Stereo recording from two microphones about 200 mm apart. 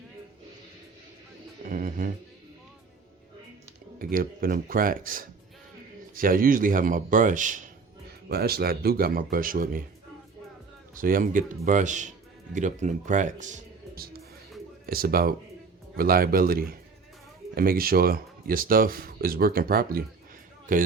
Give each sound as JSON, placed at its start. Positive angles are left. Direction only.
{"t": 1.6, "sound": "music", "side_deg": -40}
{"t": 3.9, "sound": "speech", "side_deg": -45}
{"t": 8.3, "sound": "speech", "side_deg": -50}
{"t": 10.9, "sound": "a man's voice", "side_deg": -45}